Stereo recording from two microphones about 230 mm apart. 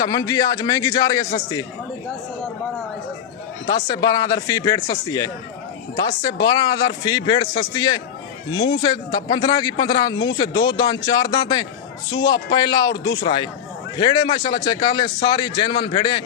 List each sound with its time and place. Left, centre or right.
0.0 s a man's voice: centre
3.7 s a man's voice: centre